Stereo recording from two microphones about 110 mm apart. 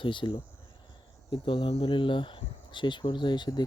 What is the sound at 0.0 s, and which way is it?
Speech, 45° left (ahead or behind).